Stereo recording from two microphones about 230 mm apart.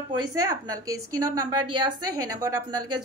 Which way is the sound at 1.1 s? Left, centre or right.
Right.